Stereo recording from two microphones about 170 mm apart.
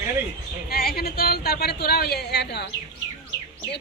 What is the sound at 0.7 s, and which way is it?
A woman's voice, 65° left (ahead or behind).